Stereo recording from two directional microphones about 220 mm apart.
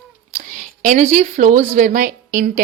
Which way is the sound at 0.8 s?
35° right (ahead or behind).